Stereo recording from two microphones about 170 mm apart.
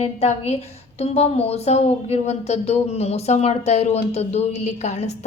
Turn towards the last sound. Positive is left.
turn(degrees=40)  # may be behind; listen again after turning